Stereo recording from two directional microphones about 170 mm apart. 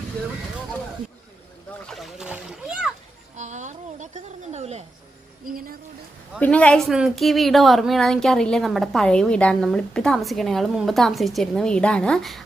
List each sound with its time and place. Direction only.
1.9 s a woman's voice: centre (ahead or behind)
3.3 s speech: 45° right (ahead or behind)
6.4 s a woman's voice: 5° left (ahead or behind)